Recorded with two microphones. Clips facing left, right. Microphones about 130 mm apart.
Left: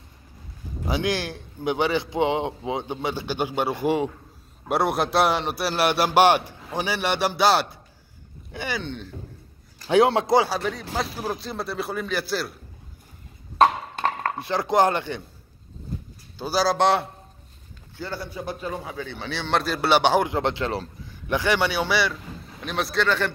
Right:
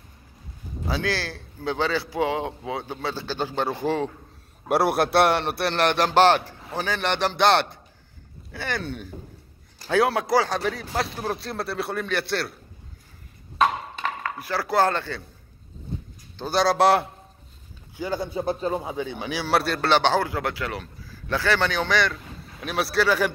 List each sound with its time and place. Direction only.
0.8 s a man's voice: 15° left (ahead or behind)
4.6 s a man's voice: centre (ahead or behind)
8.7 s speech: 5° right (ahead or behind)
9.8 s a man's voice: 25° left (ahead or behind)
10.6 s a man's voice: centre (ahead or behind)
13.6 s clip-clop: 40° left (ahead or behind)
14.4 s a man's voice: 20° left (ahead or behind)
16.3 s a man's voice: 5° left (ahead or behind)
17.9 s a man's voice: 15° right (ahead or behind)